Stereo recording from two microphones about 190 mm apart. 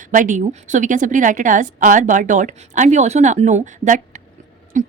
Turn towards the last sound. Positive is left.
turn(degrees=-40)  # may be behind; listen again after turning